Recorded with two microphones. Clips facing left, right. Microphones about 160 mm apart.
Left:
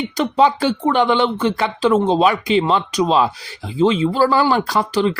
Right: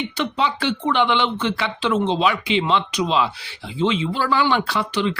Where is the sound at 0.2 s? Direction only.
40° left (ahead or behind).